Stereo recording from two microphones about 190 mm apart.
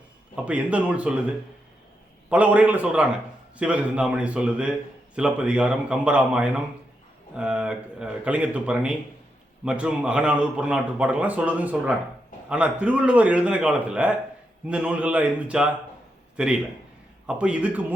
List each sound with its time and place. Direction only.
0.3 s a man's voice: 5° right (ahead or behind)
2.3 s a man's voice: 10° right (ahead or behind)